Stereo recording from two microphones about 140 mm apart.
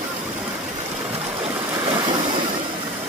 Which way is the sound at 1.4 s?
40° right (ahead or behind).